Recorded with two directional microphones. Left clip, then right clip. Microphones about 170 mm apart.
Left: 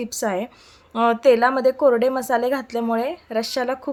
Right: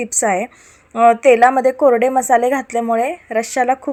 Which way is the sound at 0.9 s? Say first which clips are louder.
Right 6 dB; centre (ahead or behind).